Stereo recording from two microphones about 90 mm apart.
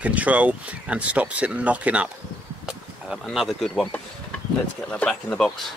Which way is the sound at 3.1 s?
Centre (ahead or behind).